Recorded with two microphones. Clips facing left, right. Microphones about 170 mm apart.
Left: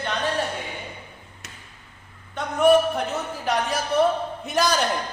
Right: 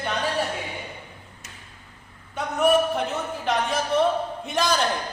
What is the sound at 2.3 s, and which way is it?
A man's voice, centre (ahead or behind).